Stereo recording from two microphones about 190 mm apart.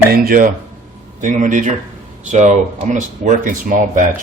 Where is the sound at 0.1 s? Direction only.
50° right (ahead or behind).